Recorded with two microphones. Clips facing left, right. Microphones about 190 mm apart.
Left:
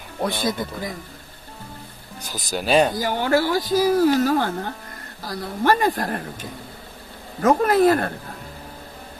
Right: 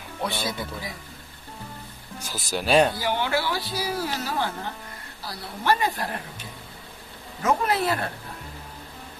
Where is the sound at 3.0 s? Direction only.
45° left (ahead or behind).